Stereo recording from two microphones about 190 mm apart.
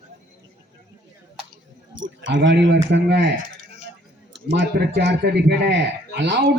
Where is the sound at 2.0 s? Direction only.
75° right (ahead or behind).